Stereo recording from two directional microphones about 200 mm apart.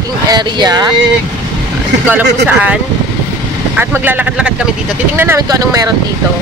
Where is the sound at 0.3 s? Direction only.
20° right (ahead or behind).